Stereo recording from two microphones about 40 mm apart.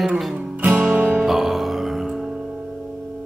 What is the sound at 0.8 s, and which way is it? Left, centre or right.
Music, right.